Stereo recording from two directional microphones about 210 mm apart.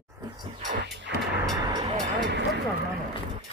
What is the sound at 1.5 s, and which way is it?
Speech, 20° right (ahead or behind).